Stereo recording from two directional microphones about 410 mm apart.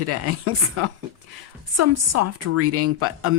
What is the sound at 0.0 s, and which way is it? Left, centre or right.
Speech, right.